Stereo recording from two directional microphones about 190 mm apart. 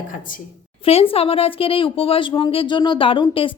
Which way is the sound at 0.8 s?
30° left (ahead or behind).